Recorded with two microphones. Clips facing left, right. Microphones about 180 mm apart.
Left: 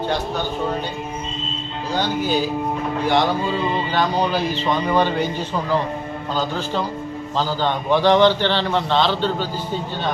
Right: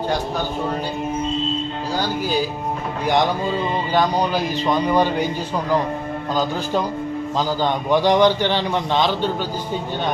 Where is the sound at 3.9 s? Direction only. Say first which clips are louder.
Right 3 dB; 10° right (ahead or behind).